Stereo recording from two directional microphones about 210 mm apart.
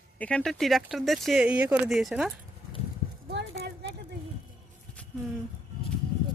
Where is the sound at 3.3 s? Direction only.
55° right (ahead or behind).